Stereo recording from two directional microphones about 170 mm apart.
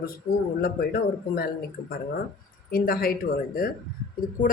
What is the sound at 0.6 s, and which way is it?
Speech, 60° left (ahead or behind).